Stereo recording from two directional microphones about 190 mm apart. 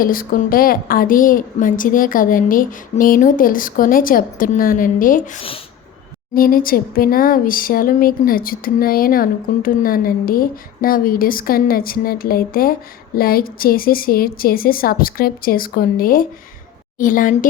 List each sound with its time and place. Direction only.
0.0 s speech: 50° left (ahead or behind)